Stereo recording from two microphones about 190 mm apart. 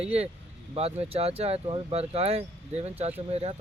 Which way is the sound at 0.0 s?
30° right (ahead or behind).